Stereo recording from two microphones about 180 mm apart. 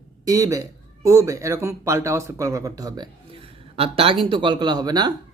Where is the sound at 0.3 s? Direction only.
20° right (ahead or behind).